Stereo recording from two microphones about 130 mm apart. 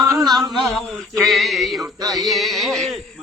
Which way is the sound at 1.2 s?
Centre (ahead or behind).